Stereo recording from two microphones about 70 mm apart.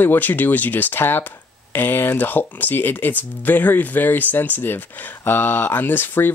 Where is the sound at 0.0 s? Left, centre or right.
Left.